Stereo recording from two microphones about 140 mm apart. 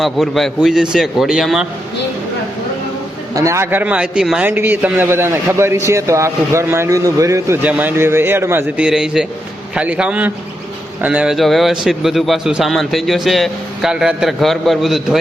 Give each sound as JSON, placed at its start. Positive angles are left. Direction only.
{"t": 0.0, "sound": "a man's voice", "side_deg": 0}
{"t": 3.3, "sound": "a man's voice", "side_deg": -20}
{"t": 8.8, "sound": "a man's voice", "side_deg": -5}